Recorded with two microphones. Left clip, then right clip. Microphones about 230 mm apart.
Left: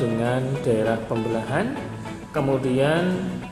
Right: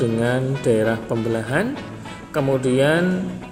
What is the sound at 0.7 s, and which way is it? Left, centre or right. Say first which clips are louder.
Speech: right 3 dB; right.